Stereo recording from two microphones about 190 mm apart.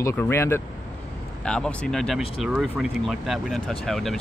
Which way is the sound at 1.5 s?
Centre (ahead or behind).